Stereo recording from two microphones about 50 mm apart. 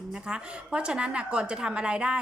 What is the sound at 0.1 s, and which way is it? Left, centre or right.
A woman's voice, centre.